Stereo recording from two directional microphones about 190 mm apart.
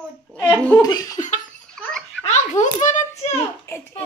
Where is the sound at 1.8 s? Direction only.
5° left (ahead or behind).